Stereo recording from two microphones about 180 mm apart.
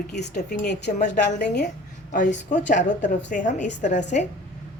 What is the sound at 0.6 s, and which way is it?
Speech, 70° left (ahead or behind).